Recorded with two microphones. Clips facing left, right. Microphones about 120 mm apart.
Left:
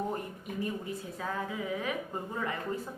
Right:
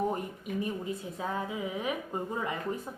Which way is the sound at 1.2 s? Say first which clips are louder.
Right 1 dB; 20° right (ahead or behind).